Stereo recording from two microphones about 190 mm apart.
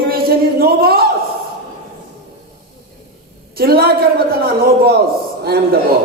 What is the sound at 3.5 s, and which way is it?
A man's voice, 55° right (ahead or behind).